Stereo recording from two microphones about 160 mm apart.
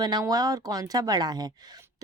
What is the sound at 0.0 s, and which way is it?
Speech, 25° right (ahead or behind).